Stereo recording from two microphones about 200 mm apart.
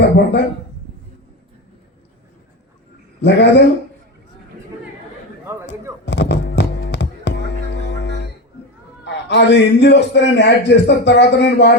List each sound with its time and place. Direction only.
0.0 s a man's voice: 60° left (ahead or behind)
3.2 s speech: 60° left (ahead or behind)
6.1 s music: 60° left (ahead or behind)
9.0 s a man's voice: 60° left (ahead or behind)